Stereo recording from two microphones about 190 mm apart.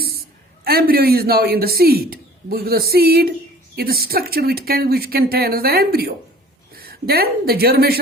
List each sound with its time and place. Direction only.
0.6 s a man's voice: 55° right (ahead or behind)